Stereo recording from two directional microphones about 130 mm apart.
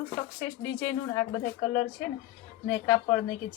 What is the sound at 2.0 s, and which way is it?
A woman's voice, 10° left (ahead or behind).